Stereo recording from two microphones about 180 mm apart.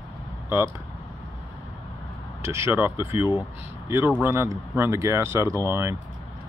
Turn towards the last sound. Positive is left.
turn(degrees=-15)  # may be behind; listen again after turning